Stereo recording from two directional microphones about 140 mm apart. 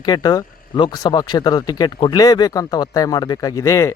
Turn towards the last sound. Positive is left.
turn(degrees=20)  # may be behind; listen again after turning